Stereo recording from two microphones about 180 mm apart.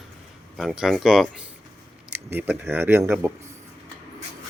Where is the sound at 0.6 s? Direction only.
Centre (ahead or behind).